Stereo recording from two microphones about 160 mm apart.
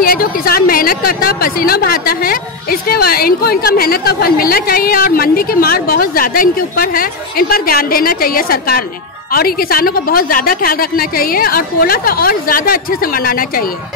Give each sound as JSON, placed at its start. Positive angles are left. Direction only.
{"t": 0.0, "sound": "a woman's voice", "side_deg": 70}